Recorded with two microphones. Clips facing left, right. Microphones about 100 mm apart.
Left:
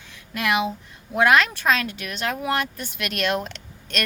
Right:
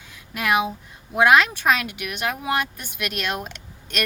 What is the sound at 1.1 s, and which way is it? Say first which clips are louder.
Speech: right 1 dB; 10° right (ahead or behind).